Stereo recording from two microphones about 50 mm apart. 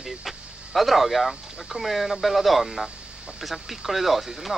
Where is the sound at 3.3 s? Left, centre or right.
Centre.